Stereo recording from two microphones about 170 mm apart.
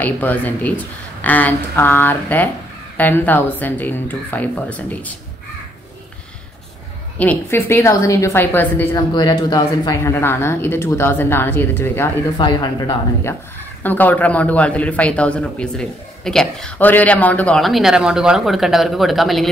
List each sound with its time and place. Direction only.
0.0 s a man's voice: 10° left (ahead or behind)
7.2 s a man's voice: 10° left (ahead or behind)
9.1 s a man's voice: 25° left (ahead or behind)
12.4 s a woman's voice: 25° left (ahead or behind); by 19.5 s centre (ahead or behind)